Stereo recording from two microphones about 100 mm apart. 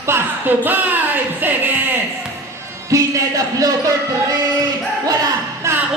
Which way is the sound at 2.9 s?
35° right (ahead or behind).